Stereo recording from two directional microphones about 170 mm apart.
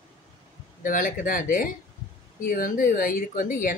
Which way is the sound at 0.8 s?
50° left (ahead or behind).